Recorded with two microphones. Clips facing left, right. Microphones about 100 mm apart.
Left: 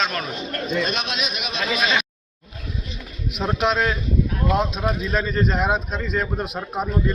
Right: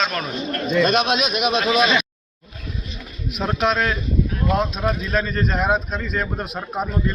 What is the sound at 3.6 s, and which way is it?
Speech, 15° left (ahead or behind).